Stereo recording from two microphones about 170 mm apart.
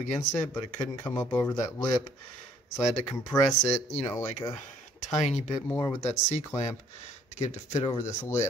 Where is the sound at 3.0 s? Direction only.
15° left (ahead or behind).